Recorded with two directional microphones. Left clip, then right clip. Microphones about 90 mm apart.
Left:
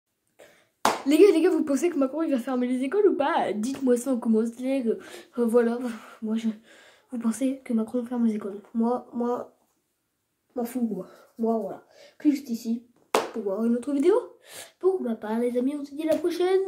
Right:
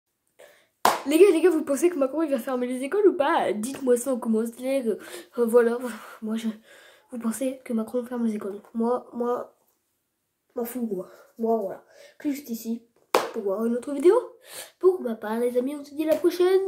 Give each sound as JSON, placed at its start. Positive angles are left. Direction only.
{"t": 1.0, "sound": "a woman's voice", "side_deg": -15}
{"t": 6.6, "sound": "speech", "side_deg": -25}
{"t": 10.5, "sound": "a woman's voice", "side_deg": -25}